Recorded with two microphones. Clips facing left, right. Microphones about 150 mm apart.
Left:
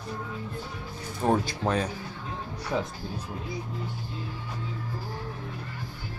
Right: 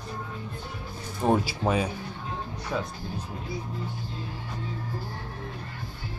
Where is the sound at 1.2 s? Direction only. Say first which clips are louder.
Right 1 dB; 10° right (ahead or behind).